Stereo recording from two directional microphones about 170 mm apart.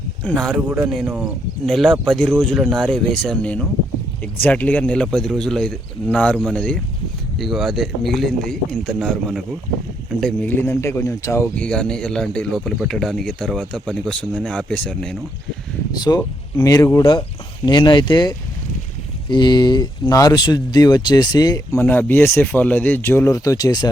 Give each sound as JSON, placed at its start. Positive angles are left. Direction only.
{"t": 0.2, "sound": "speech", "side_deg": 5}
{"t": 1.0, "sound": "speech", "side_deg": -10}
{"t": 1.6, "sound": "speech", "side_deg": 0}
{"t": 16.0, "sound": "speech", "side_deg": 25}